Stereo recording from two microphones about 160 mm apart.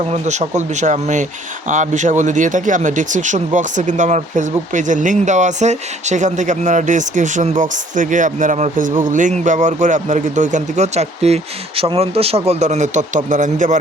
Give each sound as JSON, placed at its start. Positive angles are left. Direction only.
{"t": 0.1, "sound": "speech", "side_deg": -45}